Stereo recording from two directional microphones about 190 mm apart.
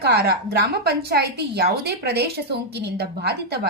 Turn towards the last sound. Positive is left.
turn(degrees=-55)  # may be behind; listen again after turning